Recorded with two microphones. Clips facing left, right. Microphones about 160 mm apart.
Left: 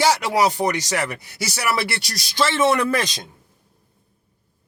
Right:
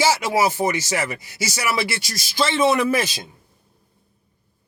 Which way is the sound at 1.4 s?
60° left (ahead or behind).